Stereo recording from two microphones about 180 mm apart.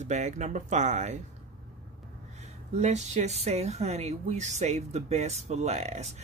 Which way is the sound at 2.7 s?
40° right (ahead or behind).